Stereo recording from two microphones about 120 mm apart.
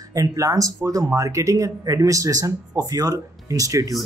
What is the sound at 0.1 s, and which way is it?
Speech, 30° right (ahead or behind).